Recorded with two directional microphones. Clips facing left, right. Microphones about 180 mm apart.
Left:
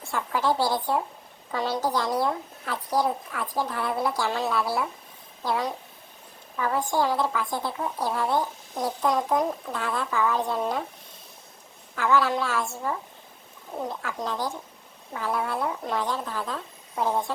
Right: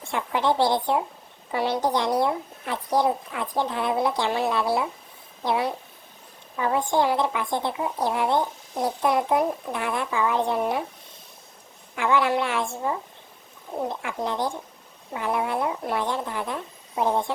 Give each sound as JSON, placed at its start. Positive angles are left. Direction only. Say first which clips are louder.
{"t": 0.1, "sound": "a child's voice", "louder": "right 2 dB", "side_deg": -20}
{"t": 11.9, "sound": "a child's voice", "louder": "right 1 dB", "side_deg": -20}